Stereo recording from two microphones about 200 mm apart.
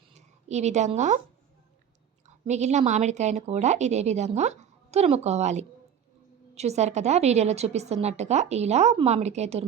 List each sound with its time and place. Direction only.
0.1 s a woman's voice: 35° right (ahead or behind)
2.2 s a woman's voice: 35° right (ahead or behind)